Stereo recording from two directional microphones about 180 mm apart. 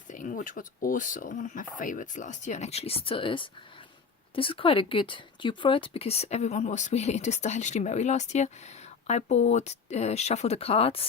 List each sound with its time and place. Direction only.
0.1 s speech: 45° left (ahead or behind)